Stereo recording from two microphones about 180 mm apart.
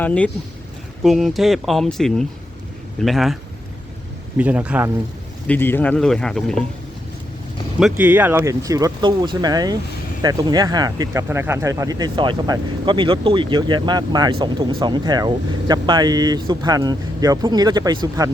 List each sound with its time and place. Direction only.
0.0 s speech: 5° left (ahead or behind)
4.4 s speech: 5° right (ahead or behind)
5.5 s speech: 10° left (ahead or behind)
7.8 s speech: 5° right (ahead or behind); by 18.3 s 20° right (ahead or behind)